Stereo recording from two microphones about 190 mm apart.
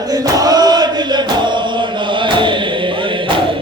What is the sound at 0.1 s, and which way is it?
Chant, 20° right (ahead or behind).